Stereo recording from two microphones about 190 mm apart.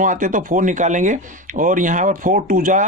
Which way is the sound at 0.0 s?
45° right (ahead or behind).